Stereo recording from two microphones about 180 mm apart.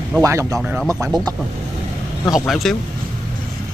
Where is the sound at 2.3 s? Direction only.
Centre (ahead or behind).